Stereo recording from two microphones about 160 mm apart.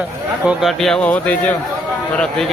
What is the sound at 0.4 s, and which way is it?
Speech, centre (ahead or behind).